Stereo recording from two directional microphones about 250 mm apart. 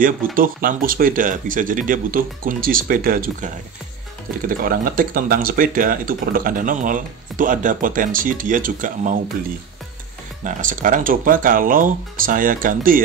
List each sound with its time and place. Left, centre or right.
0.0 s speech: right
4.5 s speech: right
10.4 s speech: right